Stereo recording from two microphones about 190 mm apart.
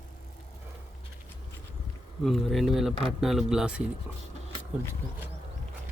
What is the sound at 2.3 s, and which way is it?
Speech, centre (ahead or behind).